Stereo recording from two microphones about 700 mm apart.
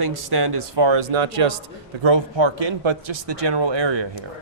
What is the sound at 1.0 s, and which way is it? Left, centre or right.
Speech, right.